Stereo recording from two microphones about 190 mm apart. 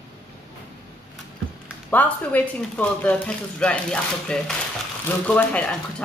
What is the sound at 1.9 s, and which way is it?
Speech, 10° left (ahead or behind).